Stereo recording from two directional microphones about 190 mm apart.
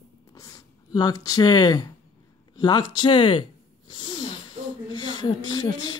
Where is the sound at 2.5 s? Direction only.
20° left (ahead or behind).